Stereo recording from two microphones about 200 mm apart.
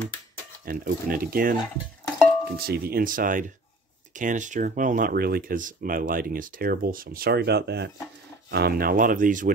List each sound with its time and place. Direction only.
0.7 s speech: 45° right (ahead or behind)